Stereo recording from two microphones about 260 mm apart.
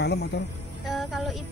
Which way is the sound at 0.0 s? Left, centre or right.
Left.